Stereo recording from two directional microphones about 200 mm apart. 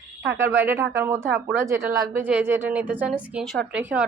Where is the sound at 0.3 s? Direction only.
15° right (ahead or behind).